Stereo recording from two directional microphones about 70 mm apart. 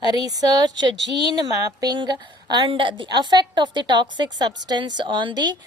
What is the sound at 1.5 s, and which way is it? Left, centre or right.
Speech, right.